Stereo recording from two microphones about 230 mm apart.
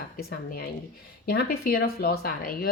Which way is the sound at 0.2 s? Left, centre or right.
Left.